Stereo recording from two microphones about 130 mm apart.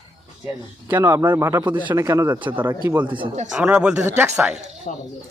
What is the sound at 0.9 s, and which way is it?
A man's voice, 25° right (ahead or behind).